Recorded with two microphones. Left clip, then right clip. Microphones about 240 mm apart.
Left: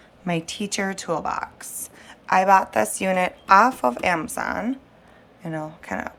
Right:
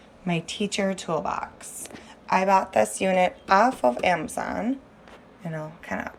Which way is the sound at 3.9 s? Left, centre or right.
Left.